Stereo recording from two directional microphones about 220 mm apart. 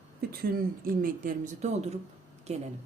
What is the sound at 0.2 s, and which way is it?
Speech, 45° right (ahead or behind).